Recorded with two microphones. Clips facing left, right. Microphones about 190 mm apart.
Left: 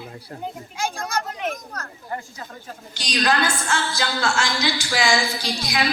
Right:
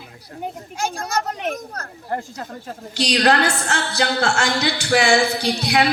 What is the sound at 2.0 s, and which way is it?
A woman's voice, 65° right (ahead or behind).